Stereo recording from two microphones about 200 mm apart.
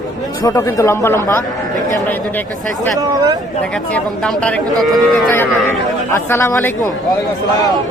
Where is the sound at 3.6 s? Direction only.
5° left (ahead or behind).